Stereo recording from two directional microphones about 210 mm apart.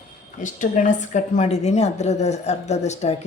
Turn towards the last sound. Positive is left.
turn(degrees=35)  # may be behind; listen again after turning